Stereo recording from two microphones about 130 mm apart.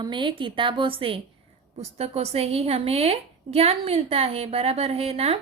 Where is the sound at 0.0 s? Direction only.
40° right (ahead or behind).